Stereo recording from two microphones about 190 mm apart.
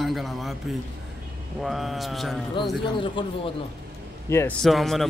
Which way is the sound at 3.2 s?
25° left (ahead or behind).